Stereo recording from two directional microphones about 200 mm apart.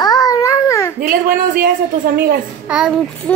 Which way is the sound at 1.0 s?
45° right (ahead or behind).